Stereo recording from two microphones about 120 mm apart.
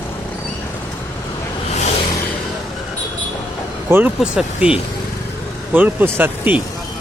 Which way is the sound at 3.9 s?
20° right (ahead or behind).